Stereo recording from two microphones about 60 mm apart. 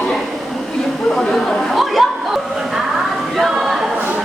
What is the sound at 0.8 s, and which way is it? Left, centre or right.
Chatter, centre.